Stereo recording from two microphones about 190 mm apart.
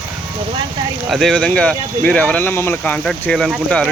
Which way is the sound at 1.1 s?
Centre (ahead or behind).